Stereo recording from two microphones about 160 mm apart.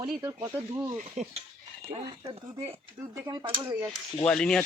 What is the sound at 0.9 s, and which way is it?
Speech, 50° right (ahead or behind).